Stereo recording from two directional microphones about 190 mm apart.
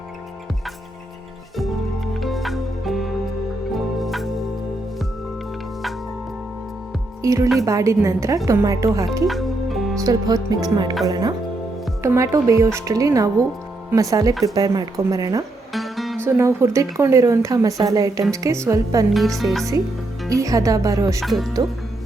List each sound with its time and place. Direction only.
2.2 s music: centre (ahead or behind)
7.2 s a woman's voice: 15° right (ahead or behind)
9.2 s music: centre (ahead or behind)
10.0 s a woman's voice: 20° right (ahead or behind)
15.7 s music: centre (ahead or behind)
16.2 s a woman's voice: 15° right (ahead or behind)
19.1 s speech: centre (ahead or behind)
20.3 s a woman's voice: 15° right (ahead or behind)
21.2 s speech: centre (ahead or behind)